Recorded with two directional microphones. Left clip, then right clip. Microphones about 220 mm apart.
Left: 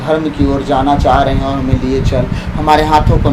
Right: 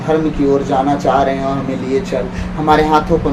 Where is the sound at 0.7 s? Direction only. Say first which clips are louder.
Left 3 dB; 40° left (ahead or behind).